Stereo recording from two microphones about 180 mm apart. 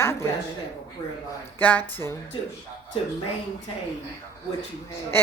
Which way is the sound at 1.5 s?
10° left (ahead or behind).